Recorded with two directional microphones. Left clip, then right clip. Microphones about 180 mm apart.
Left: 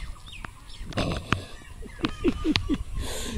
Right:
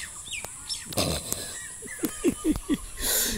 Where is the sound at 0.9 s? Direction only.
5° right (ahead or behind).